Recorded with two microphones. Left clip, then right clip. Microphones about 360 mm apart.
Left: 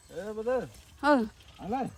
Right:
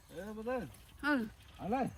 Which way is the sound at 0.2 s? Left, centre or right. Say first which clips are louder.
Left 9 dB; centre.